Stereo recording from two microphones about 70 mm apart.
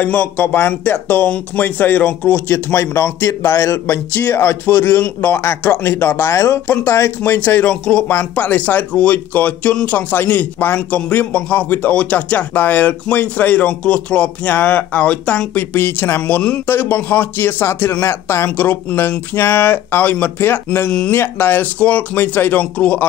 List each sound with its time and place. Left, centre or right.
0.0 s a man's voice: left
2.4 s speech: left
5.0 s a man's voice: left
5.4 s speech: left
7.4 s a man's voice: left
7.7 s speech: centre
8.1 s a man's voice: left
16.2 s a man's voice: centre
16.6 s speech: left
18.6 s a man's voice: left